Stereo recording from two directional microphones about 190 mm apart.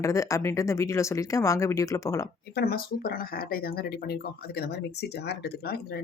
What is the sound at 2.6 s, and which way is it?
Speech, 55° left (ahead or behind).